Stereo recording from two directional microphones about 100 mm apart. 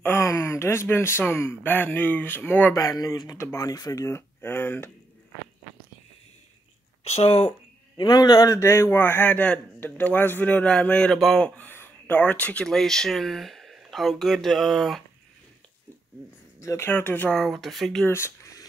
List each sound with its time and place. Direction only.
0.0 s speech: 25° left (ahead or behind)
2.7 s speech: 35° left (ahead or behind); by 4.9 s 20° left (ahead or behind)
7.1 s speech: 85° left
8.0 s a man's voice: 45° left (ahead or behind); by 11.4 s 5° left (ahead or behind)
11.4 s speech: 15° left (ahead or behind); by 15.0 s centre (ahead or behind)
16.5 s speech: 30° left (ahead or behind)
16.9 s a man's voice: 20° left (ahead or behind)
17.3 s speech: 5° left (ahead or behind)
18.0 s a sound: 25° left (ahead or behind)